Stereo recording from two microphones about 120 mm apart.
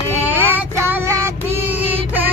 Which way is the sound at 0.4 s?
20° right (ahead or behind).